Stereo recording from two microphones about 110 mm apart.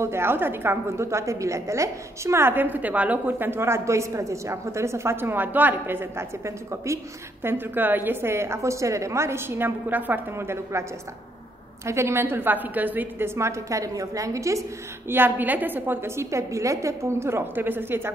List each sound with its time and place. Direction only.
0.0 s a woman's voice: 20° right (ahead or behind)
15.0 s a woman's voice: 20° right (ahead or behind)